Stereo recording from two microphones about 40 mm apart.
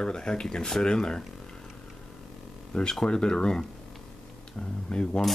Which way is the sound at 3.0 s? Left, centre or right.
Centre.